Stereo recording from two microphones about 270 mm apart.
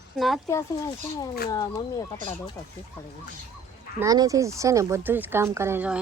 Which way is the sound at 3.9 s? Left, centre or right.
Centre.